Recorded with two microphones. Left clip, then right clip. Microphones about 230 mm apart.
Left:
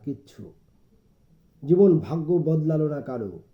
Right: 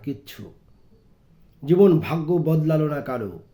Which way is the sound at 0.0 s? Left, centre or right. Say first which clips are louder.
Right 2 dB; centre.